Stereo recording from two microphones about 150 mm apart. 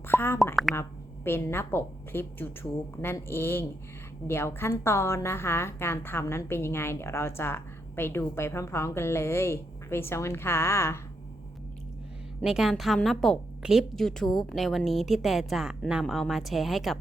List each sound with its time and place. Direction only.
0.1 s a sound: 15° left (ahead or behind)
0.5 s a woman's voice: centre (ahead or behind)
0.8 s a woman's voice: 15° left (ahead or behind)
12.4 s a woman's voice: centre (ahead or behind)